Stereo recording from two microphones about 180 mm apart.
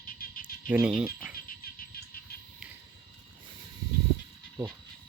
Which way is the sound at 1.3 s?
55° left (ahead or behind).